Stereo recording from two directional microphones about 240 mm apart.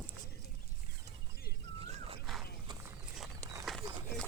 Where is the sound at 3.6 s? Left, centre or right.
Centre.